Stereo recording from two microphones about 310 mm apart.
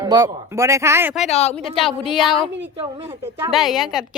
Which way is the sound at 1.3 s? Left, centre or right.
Left.